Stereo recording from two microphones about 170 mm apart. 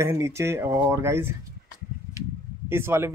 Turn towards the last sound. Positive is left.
turn(degrees=-15)  # may be behind; listen again after turning